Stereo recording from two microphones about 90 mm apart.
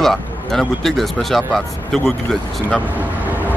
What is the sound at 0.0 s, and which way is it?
Speech, 5° left (ahead or behind).